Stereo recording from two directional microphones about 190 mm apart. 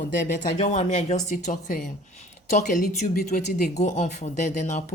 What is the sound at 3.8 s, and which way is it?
Speech, 40° left (ahead or behind).